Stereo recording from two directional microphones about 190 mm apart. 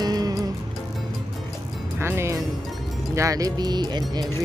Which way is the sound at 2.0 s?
15° right (ahead or behind).